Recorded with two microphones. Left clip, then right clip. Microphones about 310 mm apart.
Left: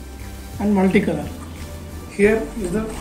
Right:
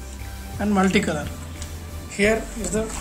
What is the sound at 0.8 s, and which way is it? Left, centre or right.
Speech, right.